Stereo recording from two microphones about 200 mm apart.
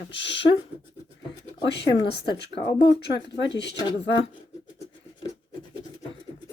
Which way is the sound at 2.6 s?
50° left (ahead or behind).